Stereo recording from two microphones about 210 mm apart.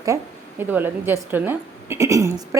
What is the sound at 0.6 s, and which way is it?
A woman's voice, 10° right (ahead or behind).